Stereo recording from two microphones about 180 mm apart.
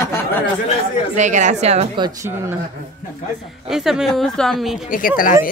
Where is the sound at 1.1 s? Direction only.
40° right (ahead or behind).